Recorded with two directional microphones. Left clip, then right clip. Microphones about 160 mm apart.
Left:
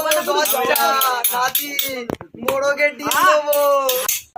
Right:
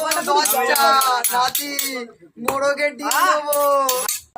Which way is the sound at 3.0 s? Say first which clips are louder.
Left 2 dB; 20° right (ahead or behind).